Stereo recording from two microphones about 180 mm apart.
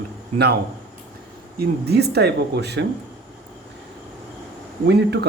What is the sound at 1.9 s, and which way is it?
Speech, 65° right (ahead or behind).